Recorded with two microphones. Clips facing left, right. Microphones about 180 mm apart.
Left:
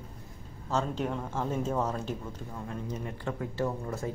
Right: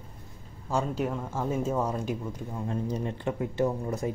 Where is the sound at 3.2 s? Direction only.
20° right (ahead or behind).